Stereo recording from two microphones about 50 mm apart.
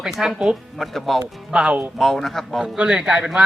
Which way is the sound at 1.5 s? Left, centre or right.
Centre.